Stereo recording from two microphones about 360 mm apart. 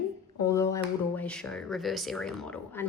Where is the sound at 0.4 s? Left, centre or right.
Centre.